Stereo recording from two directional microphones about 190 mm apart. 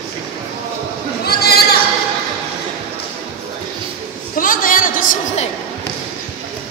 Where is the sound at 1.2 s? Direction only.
55° left (ahead or behind).